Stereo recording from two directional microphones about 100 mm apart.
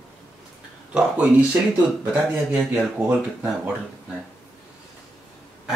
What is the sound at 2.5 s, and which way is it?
Speech, 15° right (ahead or behind).